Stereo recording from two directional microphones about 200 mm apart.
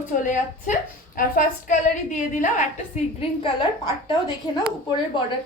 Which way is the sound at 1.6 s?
40° left (ahead or behind).